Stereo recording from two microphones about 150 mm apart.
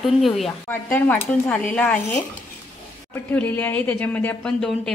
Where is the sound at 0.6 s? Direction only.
15° left (ahead or behind).